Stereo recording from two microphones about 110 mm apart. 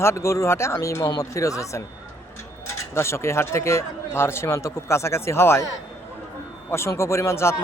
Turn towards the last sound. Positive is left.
turn(degrees=25)  # may be behind; listen again after turning